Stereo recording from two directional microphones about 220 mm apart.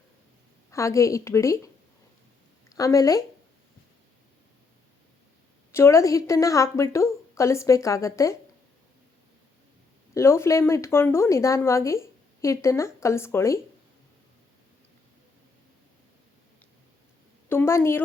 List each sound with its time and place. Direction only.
0.7 s a woman's voice: 15° left (ahead or behind)
5.7 s speech: 15° left (ahead or behind)
10.2 s speech: 10° left (ahead or behind)
17.5 s speech: 10° left (ahead or behind)